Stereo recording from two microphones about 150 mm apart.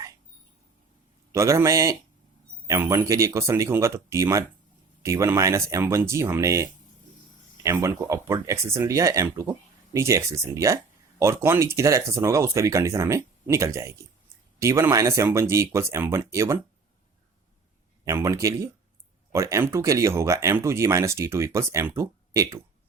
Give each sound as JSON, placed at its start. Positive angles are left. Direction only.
{"t": 1.3, "sound": "speech", "side_deg": -20}
{"t": 18.0, "sound": "speech", "side_deg": -20}